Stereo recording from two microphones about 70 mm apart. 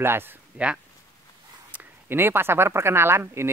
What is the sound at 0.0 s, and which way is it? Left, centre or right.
Speech, right.